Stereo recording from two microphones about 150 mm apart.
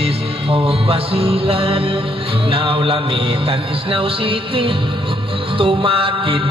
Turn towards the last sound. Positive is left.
turn(degrees=-35)  # may be behind; listen again after turning